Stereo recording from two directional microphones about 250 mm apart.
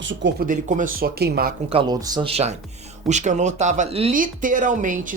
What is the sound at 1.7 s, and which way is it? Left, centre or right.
Speech, centre.